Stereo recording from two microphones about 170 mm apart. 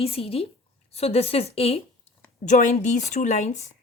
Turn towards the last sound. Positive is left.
turn(degrees=40)  # may be behind; listen again after turning